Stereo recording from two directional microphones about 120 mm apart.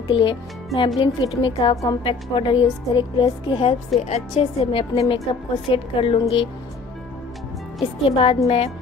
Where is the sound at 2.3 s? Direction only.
45° left (ahead or behind).